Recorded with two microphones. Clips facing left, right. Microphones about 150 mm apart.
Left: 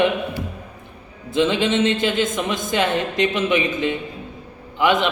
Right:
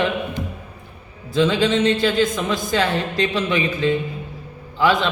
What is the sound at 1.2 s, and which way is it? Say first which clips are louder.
A woman's voice: right 1 dB; 20° left (ahead or behind).